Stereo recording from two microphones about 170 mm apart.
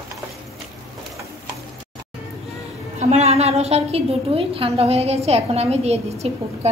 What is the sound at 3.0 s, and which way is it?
A woman's voice, 40° right (ahead or behind).